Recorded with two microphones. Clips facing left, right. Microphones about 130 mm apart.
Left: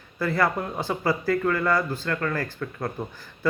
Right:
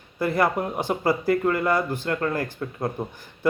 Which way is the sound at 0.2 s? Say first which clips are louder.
Right 2 dB; 20° right (ahead or behind).